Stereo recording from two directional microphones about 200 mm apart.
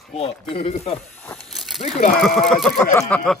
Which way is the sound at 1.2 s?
Centre (ahead or behind).